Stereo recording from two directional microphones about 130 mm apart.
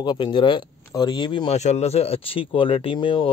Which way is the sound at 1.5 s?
60° left (ahead or behind).